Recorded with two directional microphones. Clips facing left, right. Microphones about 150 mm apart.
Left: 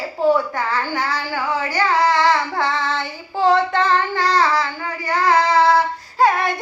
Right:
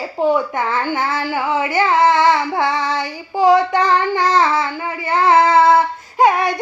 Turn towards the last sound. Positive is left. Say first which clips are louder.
# right 3 dB
turn(degrees=-20)  # may be behind; listen again after turning